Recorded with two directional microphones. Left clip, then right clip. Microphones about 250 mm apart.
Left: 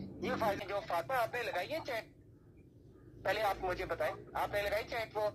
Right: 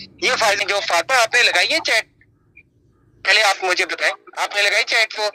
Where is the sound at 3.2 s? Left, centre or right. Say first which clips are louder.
Right 19 dB; right.